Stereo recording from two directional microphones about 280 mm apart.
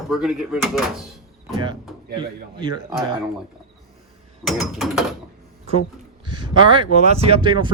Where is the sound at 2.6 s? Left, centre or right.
Centre.